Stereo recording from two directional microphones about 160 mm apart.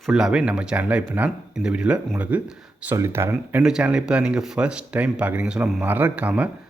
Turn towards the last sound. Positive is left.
turn(degrees=-10)  # may be behind; listen again after turning